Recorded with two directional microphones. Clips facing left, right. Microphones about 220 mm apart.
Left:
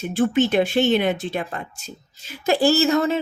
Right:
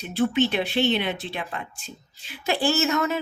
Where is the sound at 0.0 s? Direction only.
50° left (ahead or behind).